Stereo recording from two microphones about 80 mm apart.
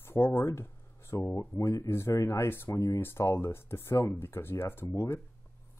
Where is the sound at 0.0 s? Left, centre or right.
Left.